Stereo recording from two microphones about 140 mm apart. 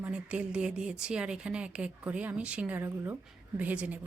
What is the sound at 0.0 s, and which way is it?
A woman's voice, 10° right (ahead or behind).